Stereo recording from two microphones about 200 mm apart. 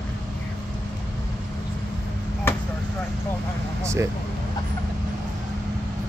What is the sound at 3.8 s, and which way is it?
Speech, 15° right (ahead or behind).